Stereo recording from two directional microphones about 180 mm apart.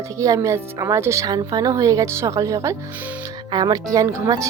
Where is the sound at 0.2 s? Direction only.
20° right (ahead or behind).